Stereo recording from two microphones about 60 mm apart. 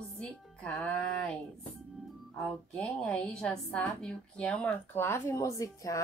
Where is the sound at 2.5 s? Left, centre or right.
Centre.